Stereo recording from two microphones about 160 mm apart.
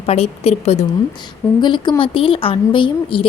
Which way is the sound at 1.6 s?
30° left (ahead or behind).